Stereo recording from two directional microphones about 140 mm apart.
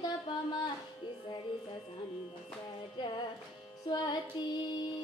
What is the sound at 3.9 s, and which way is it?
Music, 30° left (ahead or behind).